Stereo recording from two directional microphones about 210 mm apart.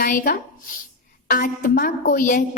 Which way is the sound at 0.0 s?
45° left (ahead or behind).